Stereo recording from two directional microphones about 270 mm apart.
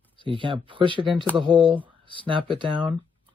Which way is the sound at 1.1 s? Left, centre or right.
Centre.